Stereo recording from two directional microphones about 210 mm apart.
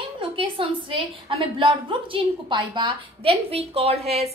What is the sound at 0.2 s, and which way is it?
A woman's voice, 25° right (ahead or behind).